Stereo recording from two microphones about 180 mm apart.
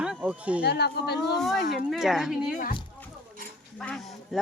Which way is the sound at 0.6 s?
65° left (ahead or behind).